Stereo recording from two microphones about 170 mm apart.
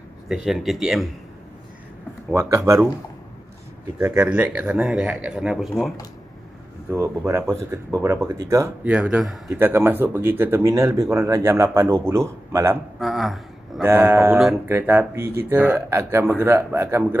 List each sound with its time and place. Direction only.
0.3 s speech: centre (ahead or behind)
2.3 s speech: 15° right (ahead or behind)
4.0 s speech: 5° right (ahead or behind)
6.9 s speech: 15° right (ahead or behind)
8.8 s speech: 5° right (ahead or behind)
9.5 s speech: 15° right (ahead or behind)
13.0 s a sound: centre (ahead or behind)
13.8 s speech: 15° right (ahead or behind)